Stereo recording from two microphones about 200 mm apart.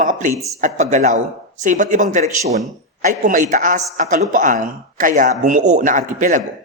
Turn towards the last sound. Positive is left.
turn(degrees=-40)  # may be behind; listen again after turning